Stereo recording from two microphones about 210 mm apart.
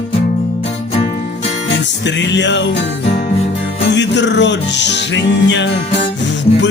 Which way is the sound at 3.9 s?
55° left (ahead or behind).